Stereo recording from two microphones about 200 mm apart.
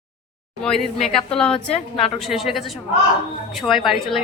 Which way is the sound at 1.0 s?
5° left (ahead or behind).